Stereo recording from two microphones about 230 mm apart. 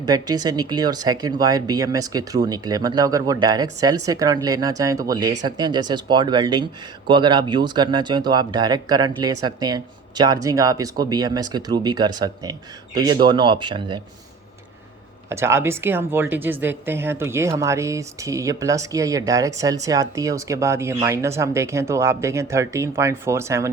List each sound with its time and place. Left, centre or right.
0.0 s a woman's voice: centre
15.3 s a woman's voice: centre